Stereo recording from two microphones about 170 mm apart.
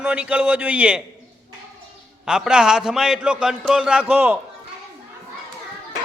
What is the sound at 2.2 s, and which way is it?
A man's voice, 5° right (ahead or behind).